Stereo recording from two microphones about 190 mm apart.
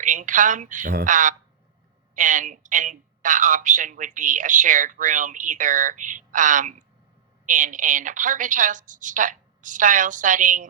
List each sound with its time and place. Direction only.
0.0 s a woman's voice: 40° right (ahead or behind)